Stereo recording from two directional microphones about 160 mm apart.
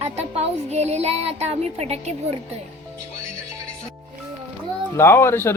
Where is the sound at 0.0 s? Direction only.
40° right (ahead or behind).